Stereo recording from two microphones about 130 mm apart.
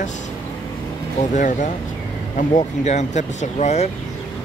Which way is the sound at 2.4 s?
65° left (ahead or behind).